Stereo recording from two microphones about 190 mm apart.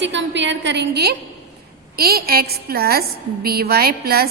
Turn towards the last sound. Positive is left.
turn(degrees=-55)  # may be behind; listen again after turning